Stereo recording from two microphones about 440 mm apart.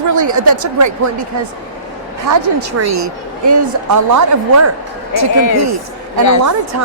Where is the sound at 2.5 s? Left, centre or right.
Right.